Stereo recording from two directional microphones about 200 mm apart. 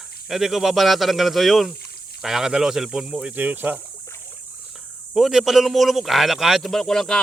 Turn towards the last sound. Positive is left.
turn(degrees=0)  # may be behind; listen again after turning